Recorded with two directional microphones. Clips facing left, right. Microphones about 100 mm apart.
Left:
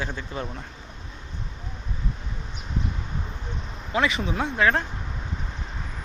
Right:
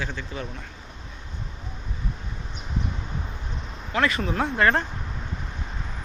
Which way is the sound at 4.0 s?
Centre (ahead or behind).